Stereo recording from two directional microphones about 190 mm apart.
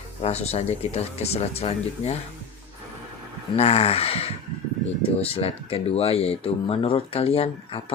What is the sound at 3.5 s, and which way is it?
Speech, 35° left (ahead or behind).